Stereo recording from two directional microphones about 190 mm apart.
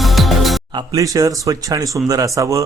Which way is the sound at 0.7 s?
20° right (ahead or behind).